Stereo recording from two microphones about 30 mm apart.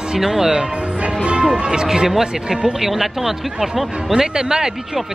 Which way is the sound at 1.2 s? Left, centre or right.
Right.